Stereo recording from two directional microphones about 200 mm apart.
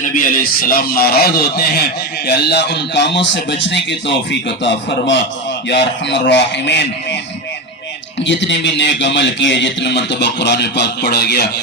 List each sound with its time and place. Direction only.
0.0 s a man's voice: 45° left (ahead or behind); by 7.2 s 60° left (ahead or behind)
8.2 s a man's voice: 65° left (ahead or behind)